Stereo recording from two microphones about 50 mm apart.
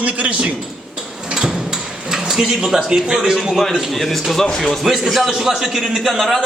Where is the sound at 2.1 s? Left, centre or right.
Centre.